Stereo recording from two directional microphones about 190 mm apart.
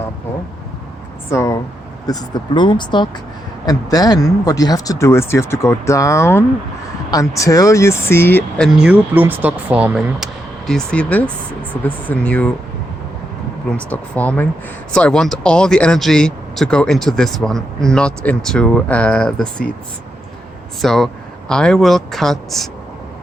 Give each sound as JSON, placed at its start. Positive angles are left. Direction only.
{"t": 1.3, "sound": "a sound", "side_deg": 15}
{"t": 2.0, "sound": "speech", "side_deg": 20}
{"t": 10.7, "sound": "speech", "side_deg": 5}
{"t": 13.7, "sound": "speech", "side_deg": 10}
{"t": 20.8, "sound": "speech", "side_deg": 0}